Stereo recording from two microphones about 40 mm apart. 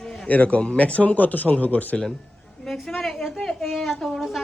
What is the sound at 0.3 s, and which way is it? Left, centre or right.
Speech, left.